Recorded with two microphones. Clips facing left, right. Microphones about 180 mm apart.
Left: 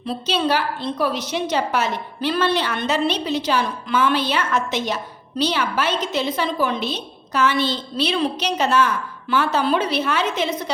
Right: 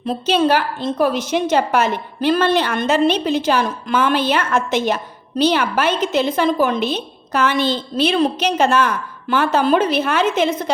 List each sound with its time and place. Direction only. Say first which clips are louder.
0.0 s a woman's voice: right 5 dB; 45° right (ahead or behind)